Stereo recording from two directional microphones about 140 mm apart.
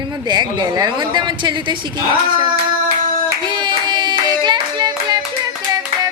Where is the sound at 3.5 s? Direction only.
30° right (ahead or behind).